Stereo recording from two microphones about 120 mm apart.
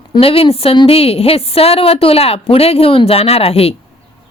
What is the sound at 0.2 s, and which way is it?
A woman's voice, 50° left (ahead or behind).